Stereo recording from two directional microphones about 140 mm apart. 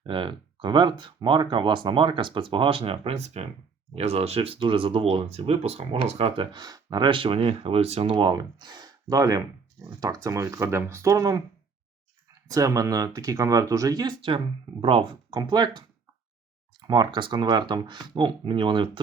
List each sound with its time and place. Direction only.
0.0 s speech: 35° right (ahead or behind)
16.8 s speech: 35° right (ahead or behind)